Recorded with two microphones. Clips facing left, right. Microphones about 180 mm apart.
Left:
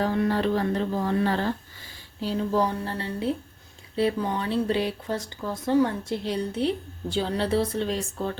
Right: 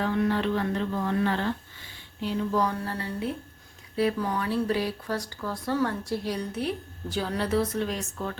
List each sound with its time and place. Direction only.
0.0 s music: 35° left (ahead or behind)
3.9 s speech: 25° left (ahead or behind)